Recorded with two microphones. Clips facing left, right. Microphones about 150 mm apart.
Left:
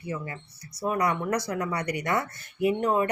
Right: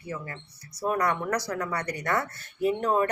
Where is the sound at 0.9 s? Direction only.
10° left (ahead or behind).